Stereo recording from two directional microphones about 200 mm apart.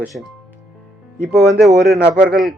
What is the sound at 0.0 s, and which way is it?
Speech, centre (ahead or behind).